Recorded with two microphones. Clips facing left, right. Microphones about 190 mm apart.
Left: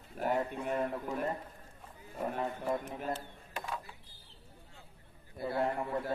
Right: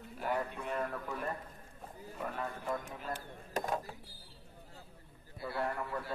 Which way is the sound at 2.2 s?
30° left (ahead or behind).